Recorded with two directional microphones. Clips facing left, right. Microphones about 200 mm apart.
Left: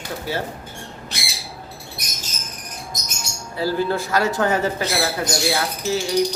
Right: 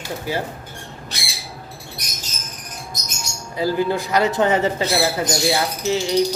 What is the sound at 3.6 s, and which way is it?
Speech, 15° right (ahead or behind).